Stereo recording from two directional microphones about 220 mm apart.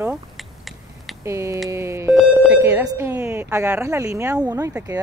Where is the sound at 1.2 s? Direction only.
10° right (ahead or behind).